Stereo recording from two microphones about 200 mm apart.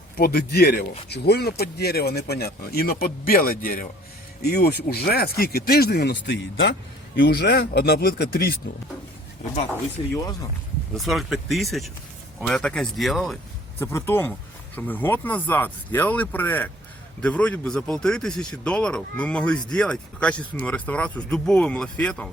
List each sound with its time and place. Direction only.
0.2 s speech: 50° left (ahead or behind)
10.9 s a man's voice: centre (ahead or behind)
13.7 s a man's voice: 15° left (ahead or behind)